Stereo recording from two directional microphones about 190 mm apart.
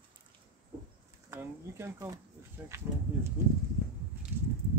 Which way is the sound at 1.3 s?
15° right (ahead or behind).